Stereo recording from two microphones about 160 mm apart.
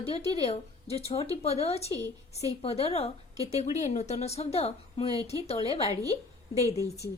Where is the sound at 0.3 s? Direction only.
40° left (ahead or behind).